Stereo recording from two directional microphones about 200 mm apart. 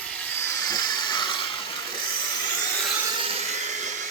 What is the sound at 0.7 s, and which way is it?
Steam, 20° left (ahead or behind).